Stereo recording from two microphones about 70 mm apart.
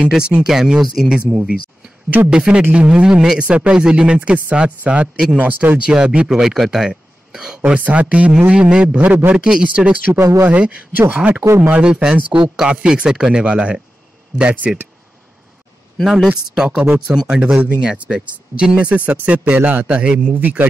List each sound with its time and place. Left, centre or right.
0.5 s a man's voice: centre; by 5.8 s right
5.9 s speech: centre
10.1 s speech: right
10.4 s a man's voice: right
11.4 s speech: right
11.7 s speech: centre
16.0 s a man's voice: centre; by 20.6 s right